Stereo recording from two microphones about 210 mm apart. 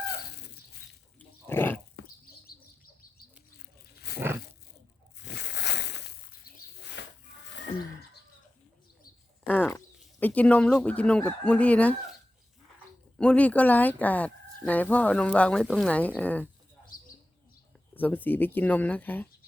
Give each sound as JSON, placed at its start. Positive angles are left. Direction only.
{"t": 1.5, "sound": "pig", "side_deg": 10}
{"t": 4.1, "sound": "roaring cats", "side_deg": 50}
{"t": 5.2, "sound": "bird flight", "side_deg": 55}
{"t": 9.5, "sound": "speech", "side_deg": 5}
{"t": 13.1, "sound": "speech", "side_deg": 5}
{"t": 17.9, "sound": "speech", "side_deg": 10}